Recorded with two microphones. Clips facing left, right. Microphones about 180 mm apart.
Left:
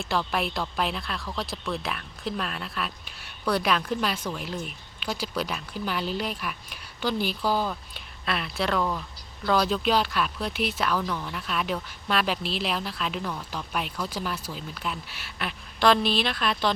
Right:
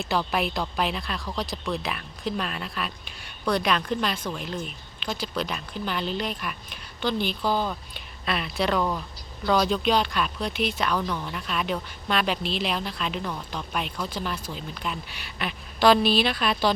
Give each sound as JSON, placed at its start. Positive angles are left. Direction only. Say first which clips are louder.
{"t": 0.0, "sound": "speech", "louder": "right 2 dB", "side_deg": 0}